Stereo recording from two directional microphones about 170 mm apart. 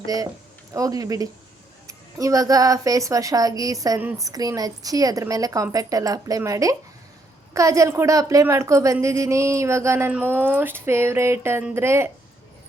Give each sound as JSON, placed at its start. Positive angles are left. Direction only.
{"t": 0.7, "sound": "a woman's voice", "side_deg": -20}